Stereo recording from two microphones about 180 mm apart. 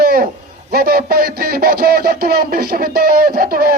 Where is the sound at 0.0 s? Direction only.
55° right (ahead or behind).